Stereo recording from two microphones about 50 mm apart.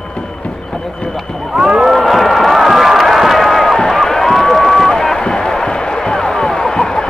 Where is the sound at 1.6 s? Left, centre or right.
Centre.